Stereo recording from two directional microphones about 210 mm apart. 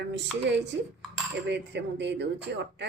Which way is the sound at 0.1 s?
55° right (ahead or behind).